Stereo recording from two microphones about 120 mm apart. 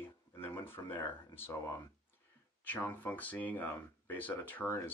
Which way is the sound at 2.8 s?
15° left (ahead or behind).